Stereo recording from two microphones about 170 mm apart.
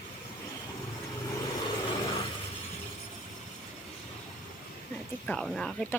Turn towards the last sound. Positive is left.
turn(degrees=5)  # may be behind; listen again after turning